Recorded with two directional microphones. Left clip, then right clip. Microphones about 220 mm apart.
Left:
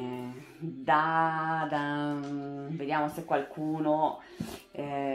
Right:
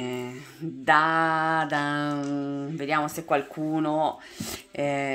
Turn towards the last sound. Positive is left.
turn(degrees=-40)  # may be behind; listen again after turning